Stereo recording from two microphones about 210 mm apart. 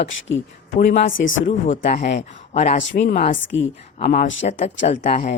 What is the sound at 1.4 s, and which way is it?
Speech, 35° left (ahead or behind).